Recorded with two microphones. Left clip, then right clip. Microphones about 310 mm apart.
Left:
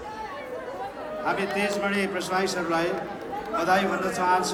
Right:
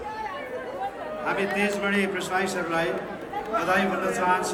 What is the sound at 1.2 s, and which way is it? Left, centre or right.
A man's voice, centre.